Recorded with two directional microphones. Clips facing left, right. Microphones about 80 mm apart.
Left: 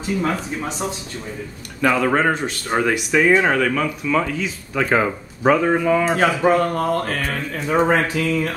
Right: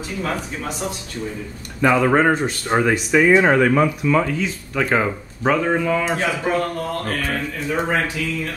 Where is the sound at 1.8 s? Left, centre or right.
Centre.